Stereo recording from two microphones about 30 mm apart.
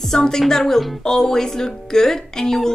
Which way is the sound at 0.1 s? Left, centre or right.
Centre.